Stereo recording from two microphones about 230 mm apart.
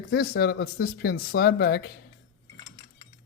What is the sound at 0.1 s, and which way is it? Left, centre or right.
Speech, left.